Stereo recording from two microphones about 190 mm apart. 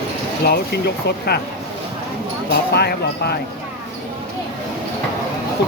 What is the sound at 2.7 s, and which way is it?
Speech, 60° left (ahead or behind).